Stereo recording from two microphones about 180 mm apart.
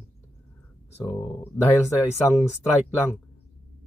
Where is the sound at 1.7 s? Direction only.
15° left (ahead or behind).